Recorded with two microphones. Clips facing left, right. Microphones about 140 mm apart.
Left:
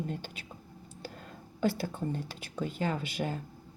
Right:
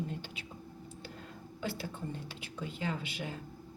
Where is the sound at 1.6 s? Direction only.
45° left (ahead or behind).